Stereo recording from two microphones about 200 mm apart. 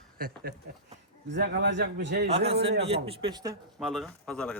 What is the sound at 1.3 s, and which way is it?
A man's voice, 60° right (ahead or behind).